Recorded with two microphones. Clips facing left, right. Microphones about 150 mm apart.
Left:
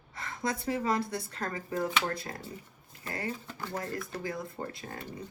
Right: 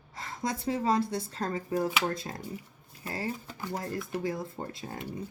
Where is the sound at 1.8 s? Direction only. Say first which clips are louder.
Right 1 dB; 15° right (ahead or behind).